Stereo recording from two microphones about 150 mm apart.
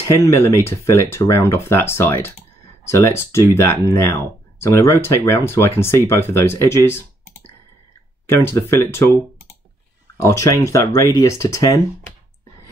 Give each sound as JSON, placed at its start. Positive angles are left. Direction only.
{"t": 0.2, "sound": "speech", "side_deg": 20}
{"t": 8.3, "sound": "speech", "side_deg": 15}
{"t": 10.3, "sound": "speech", "side_deg": 20}